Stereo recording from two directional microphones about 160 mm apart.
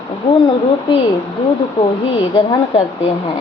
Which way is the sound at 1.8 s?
30° left (ahead or behind).